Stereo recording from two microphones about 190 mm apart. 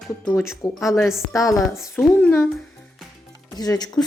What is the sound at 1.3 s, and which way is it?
Speech, 15° left (ahead or behind).